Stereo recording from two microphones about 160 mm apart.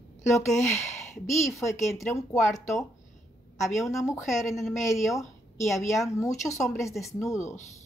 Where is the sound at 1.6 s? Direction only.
20° left (ahead or behind).